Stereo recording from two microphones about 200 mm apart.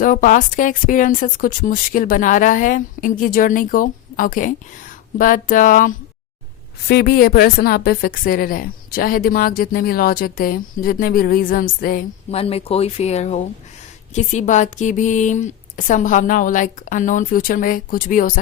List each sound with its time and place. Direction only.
0.0 s a woman's voice: 40° left (ahead or behind)
12.3 s a woman's voice: 30° left (ahead or behind)